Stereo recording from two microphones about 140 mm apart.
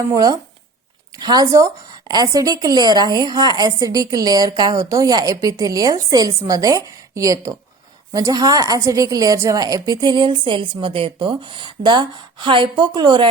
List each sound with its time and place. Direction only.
0.1 s a woman's voice: 25° right (ahead or behind)